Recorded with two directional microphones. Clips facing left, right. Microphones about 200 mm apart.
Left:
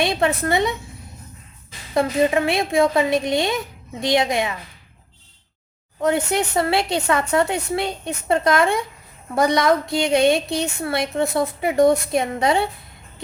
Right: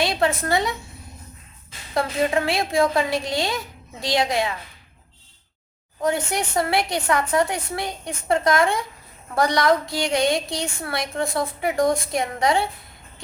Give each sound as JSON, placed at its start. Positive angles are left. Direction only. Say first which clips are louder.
{"t": 0.0, "sound": "a woman's voice", "louder": "left 2 dB", "side_deg": 20}
{"t": 1.9, "sound": "a woman's voice", "louder": "left 4 dB", "side_deg": 20}
{"t": 6.0, "sound": "a woman's voice", "louder": "left 3 dB", "side_deg": 25}